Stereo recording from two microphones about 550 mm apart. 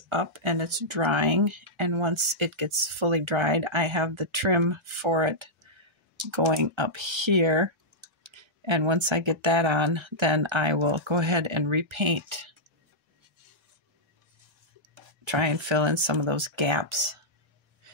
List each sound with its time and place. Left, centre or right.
0.1 s speech: right
15.2 s speech: right